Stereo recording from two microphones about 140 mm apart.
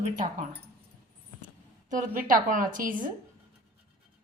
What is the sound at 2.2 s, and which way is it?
Speech, 75° right (ahead or behind).